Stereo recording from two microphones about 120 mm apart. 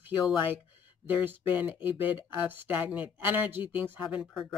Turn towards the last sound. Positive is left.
turn(degrees=0)  # may be behind; listen again after turning